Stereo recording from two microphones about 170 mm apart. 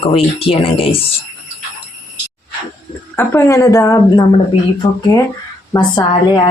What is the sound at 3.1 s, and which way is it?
Speech, 15° left (ahead or behind).